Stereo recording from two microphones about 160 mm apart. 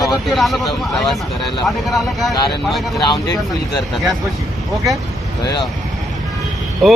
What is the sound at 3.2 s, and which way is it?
Speech, 20° left (ahead or behind).